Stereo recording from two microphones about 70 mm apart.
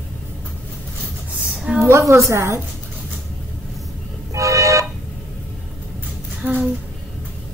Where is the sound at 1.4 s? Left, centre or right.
Centre.